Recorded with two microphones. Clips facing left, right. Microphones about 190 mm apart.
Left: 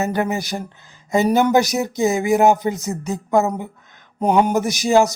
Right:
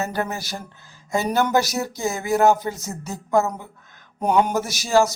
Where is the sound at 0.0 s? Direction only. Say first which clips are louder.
Left 5 dB; 15° left (ahead or behind).